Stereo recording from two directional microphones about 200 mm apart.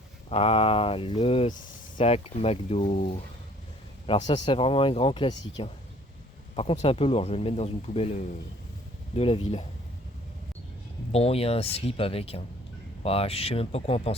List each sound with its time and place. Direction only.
0.3 s speech: 30° left (ahead or behind)
4.0 s speech: 25° left (ahead or behind)
11.1 s speech: 30° left (ahead or behind)